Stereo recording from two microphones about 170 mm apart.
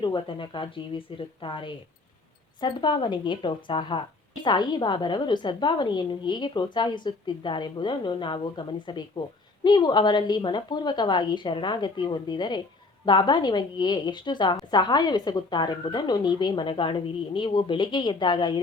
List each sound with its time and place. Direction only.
0.0 s a woman's voice: 30° left (ahead or behind)